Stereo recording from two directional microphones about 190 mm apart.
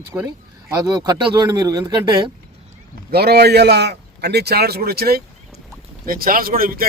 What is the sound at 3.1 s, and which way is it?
A man's voice, 55° right (ahead or behind).